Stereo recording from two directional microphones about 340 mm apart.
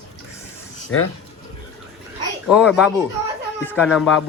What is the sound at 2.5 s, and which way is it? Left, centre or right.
Speech, centre.